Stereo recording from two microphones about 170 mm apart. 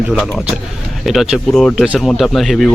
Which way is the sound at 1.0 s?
Centre (ahead or behind).